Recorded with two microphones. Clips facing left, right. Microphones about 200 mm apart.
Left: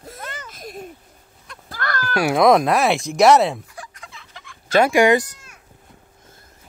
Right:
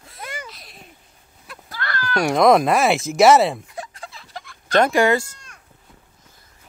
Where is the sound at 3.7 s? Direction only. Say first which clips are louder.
Right 5 dB; 25° right (ahead or behind).